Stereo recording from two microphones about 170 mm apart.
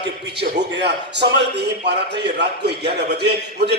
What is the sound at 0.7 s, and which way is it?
A man's voice, 85° right.